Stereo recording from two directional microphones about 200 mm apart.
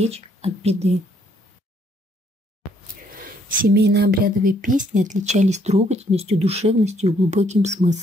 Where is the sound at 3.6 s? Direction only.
55° right (ahead or behind).